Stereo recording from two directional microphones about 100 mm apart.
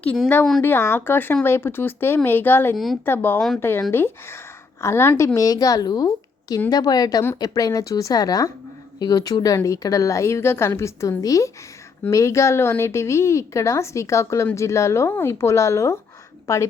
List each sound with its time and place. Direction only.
0.6 s speech: 20° left (ahead or behind)
2.7 s speech: centre (ahead or behind)
3.1 s a woman's voice: 20° left (ahead or behind)